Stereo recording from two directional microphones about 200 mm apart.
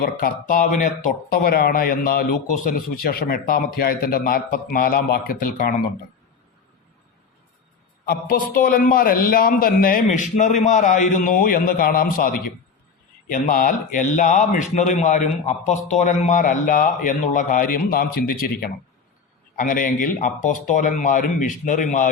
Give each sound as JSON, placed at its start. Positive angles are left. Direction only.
{"t": 0.0, "sound": "a man's voice", "side_deg": 45}
{"t": 8.0, "sound": "a man's voice", "side_deg": 50}